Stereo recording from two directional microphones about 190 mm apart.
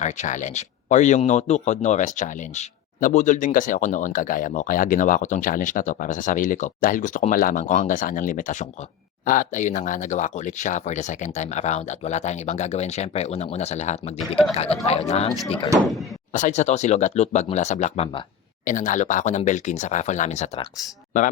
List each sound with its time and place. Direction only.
0.0 s speech: 40° left (ahead or behind)